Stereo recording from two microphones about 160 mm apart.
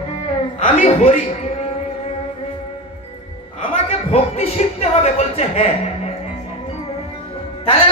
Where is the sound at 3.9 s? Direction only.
40° left (ahead or behind).